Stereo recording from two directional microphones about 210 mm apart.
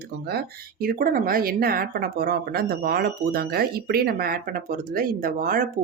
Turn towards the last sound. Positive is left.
turn(degrees=-40)  # may be behind; listen again after turning